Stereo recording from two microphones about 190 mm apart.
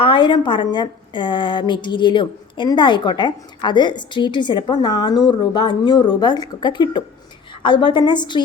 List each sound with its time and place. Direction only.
0.0 s a woman's voice: 25° left (ahead or behind)